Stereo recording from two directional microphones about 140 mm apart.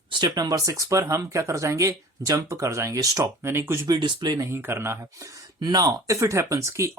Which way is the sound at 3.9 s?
30° right (ahead or behind).